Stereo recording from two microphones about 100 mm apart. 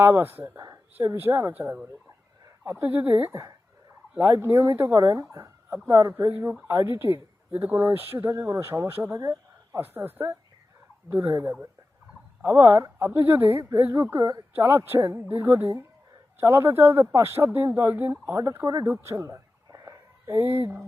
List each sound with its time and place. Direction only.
0.0 s speech: 20° right (ahead or behind)
0.5 s a sound: 35° right (ahead or behind)
0.9 s speech: 20° right (ahead or behind)
6.3 s speech: 20° right (ahead or behind)
9.8 s speech: 20° right (ahead or behind)
11.1 s speech: 35° right (ahead or behind)
18.6 s speech: 40° right (ahead or behind)
18.9 s a sound: 25° right (ahead or behind)